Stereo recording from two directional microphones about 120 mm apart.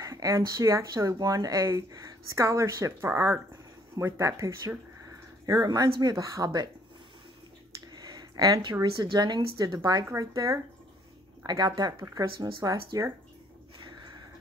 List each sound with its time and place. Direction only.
0.0 s speech: 25° right (ahead or behind)
7.9 s speech: 35° right (ahead or behind)